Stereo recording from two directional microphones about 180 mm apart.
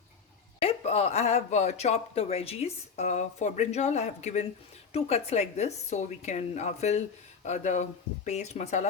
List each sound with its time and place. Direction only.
0.6 s speech: 35° left (ahead or behind)